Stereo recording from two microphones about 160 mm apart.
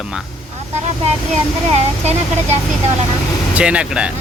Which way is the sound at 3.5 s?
5° right (ahead or behind).